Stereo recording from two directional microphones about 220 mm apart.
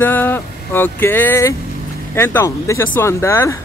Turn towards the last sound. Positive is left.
turn(degrees=10)  # may be behind; listen again after turning